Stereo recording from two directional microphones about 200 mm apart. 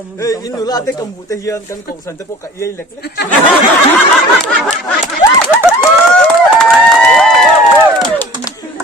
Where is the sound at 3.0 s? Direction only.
55° left (ahead or behind).